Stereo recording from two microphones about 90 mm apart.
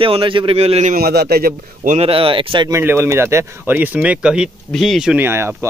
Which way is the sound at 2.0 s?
85° right.